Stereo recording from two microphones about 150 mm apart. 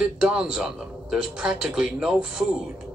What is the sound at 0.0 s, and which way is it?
Speech, 5° right (ahead or behind).